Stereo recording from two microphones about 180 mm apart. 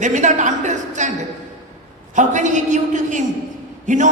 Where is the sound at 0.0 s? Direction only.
45° right (ahead or behind).